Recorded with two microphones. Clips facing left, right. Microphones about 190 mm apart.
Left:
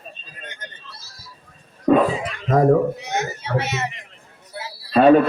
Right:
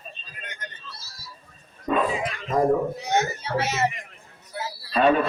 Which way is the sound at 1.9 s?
70° left (ahead or behind).